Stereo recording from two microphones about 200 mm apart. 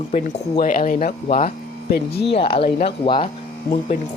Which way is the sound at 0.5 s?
45° left (ahead or behind).